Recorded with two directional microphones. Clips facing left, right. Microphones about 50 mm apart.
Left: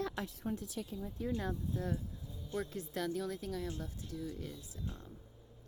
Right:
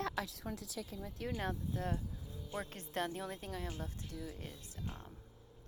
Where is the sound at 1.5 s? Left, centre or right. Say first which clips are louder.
Left 1 dB; right.